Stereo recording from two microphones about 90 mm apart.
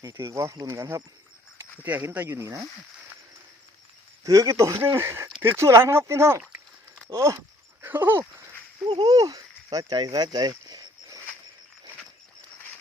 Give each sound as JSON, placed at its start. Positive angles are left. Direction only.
{"t": 0.0, "sound": "speech", "side_deg": -40}
{"t": 1.8, "sound": "speech", "side_deg": -20}
{"t": 4.2, "sound": "speech", "side_deg": -40}
{"t": 7.3, "sound": "dog", "side_deg": -25}
{"t": 8.9, "sound": "a sound", "side_deg": -60}
{"t": 9.1, "sound": "speech", "side_deg": -40}
{"t": 10.7, "sound": "a sound", "side_deg": -45}